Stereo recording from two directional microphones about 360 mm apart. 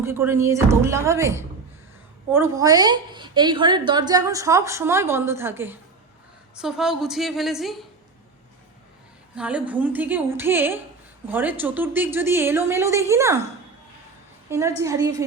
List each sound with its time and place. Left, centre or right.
0.0 s a woman's voice: centre
9.3 s a woman's voice: centre
14.5 s a woman's voice: centre